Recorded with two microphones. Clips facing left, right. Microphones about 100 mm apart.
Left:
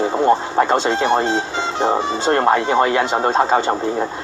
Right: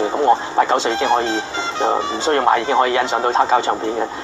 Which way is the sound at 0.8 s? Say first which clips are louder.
Left 1 dB; 50° left (ahead or behind).